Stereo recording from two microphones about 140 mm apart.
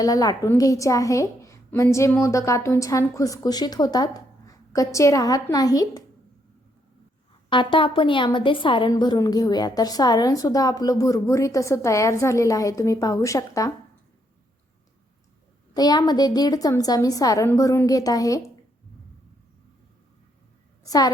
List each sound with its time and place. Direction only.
0.0 s a woman's voice: 25° left (ahead or behind)
7.5 s a woman's voice: 35° left (ahead or behind)
15.7 s a woman's voice: 30° left (ahead or behind)
20.8 s a woman's voice: 25° left (ahead or behind)